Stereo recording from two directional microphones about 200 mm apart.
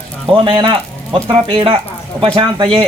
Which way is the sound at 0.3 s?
25° right (ahead or behind).